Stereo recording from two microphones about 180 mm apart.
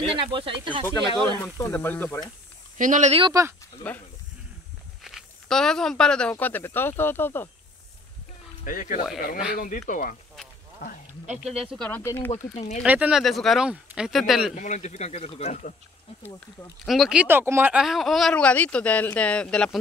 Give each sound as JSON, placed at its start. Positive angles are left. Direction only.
{"t": 0.1, "sound": "speech", "side_deg": -30}
{"t": 1.4, "sound": "speech", "side_deg": 15}
{"t": 2.8, "sound": "speech", "side_deg": -45}
{"t": 5.0, "sound": "speech", "side_deg": 0}
{"t": 8.6, "sound": "speech", "side_deg": 50}
{"t": 11.6, "sound": "speech", "side_deg": 5}
{"t": 12.8, "sound": "speech", "side_deg": -10}
{"t": 14.5, "sound": "speech", "side_deg": 40}
{"t": 16.8, "sound": "speech", "side_deg": 0}